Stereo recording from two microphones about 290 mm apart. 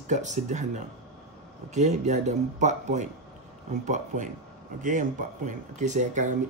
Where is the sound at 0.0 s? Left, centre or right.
Right.